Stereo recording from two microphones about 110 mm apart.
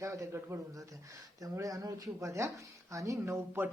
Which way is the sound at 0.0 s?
30° right (ahead or behind).